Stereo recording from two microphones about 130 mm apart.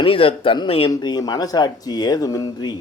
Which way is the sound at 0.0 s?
45° left (ahead or behind).